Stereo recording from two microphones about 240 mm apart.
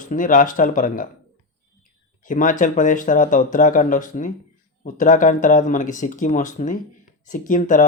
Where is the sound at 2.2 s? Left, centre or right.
Left.